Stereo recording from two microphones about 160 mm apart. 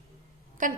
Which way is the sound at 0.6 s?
55° right (ahead or behind).